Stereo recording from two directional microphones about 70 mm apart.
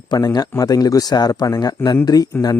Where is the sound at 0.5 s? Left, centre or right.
Left.